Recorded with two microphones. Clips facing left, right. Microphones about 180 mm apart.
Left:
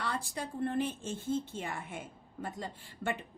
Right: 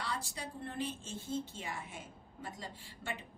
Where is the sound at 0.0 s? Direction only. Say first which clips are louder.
Left 4 dB; 55° left (ahead or behind).